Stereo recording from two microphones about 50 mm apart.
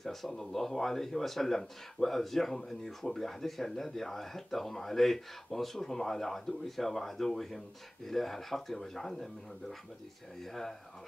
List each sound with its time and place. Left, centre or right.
0.0 s speech: centre